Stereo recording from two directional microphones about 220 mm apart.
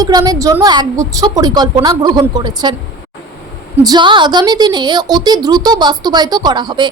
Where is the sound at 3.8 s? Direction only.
20° right (ahead or behind).